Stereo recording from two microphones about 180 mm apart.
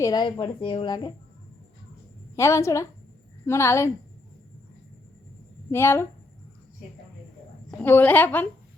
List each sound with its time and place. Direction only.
0.0 s a woman's voice: 25° left (ahead or behind)
2.3 s a woman's voice: 15° left (ahead or behind)
5.7 s a woman's voice: 15° left (ahead or behind)
7.7 s a woman's voice: 10° left (ahead or behind)